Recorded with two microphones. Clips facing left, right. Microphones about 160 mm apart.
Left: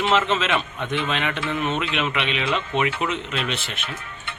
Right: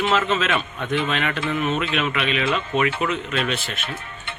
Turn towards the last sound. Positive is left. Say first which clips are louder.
# right 3 dB
turn(degrees=20)  # may be behind; listen again after turning